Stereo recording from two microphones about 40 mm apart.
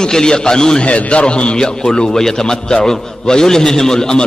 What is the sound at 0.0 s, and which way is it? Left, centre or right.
Speech, centre.